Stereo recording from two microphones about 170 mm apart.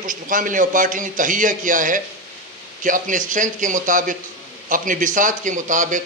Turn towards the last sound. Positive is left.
turn(degrees=-50)  # may be behind; listen again after turning